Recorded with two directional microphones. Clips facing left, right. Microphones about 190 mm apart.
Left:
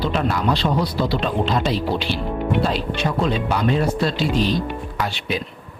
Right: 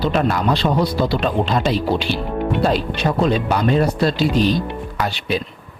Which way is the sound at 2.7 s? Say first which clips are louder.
Right 4 dB; 35° right (ahead or behind).